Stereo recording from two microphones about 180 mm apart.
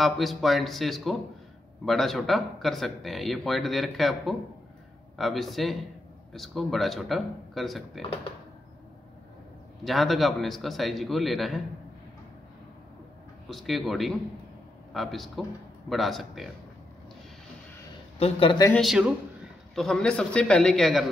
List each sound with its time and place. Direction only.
0.0 s speech: centre (ahead or behind)
9.8 s speech: centre (ahead or behind)
13.5 s speech: centre (ahead or behind)
18.2 s speech: 30° left (ahead or behind)
18.7 s speech: centre (ahead or behind)